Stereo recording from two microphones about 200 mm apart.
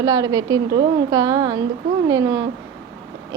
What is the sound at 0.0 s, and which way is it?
A woman's voice, 20° right (ahead or behind).